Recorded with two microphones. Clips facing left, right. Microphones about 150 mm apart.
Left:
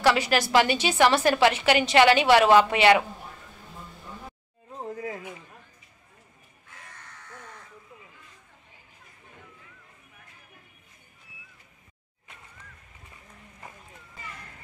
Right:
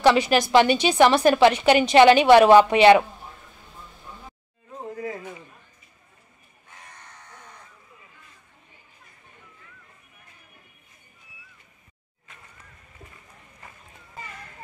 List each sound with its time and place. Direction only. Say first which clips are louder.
0.0 s a woman's voice: right 4 dB; 20° right (ahead or behind)